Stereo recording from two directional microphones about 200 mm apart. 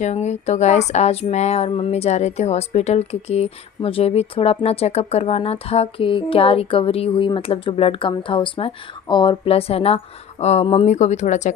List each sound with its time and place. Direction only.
0.0 s speech: 35° left (ahead or behind)